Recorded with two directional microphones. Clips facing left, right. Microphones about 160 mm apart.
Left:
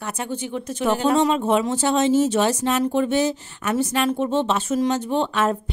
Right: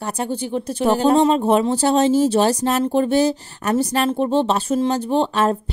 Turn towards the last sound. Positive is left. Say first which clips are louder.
# right 3 dB
turn(degrees=-35)  # may be behind; listen again after turning